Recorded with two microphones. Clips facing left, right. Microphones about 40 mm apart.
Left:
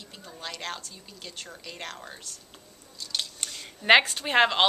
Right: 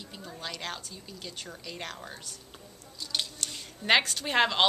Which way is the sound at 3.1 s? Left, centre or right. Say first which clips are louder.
Even; centre.